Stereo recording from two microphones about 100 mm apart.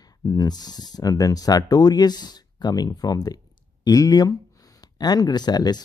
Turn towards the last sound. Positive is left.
turn(degrees=45)  # may be behind; listen again after turning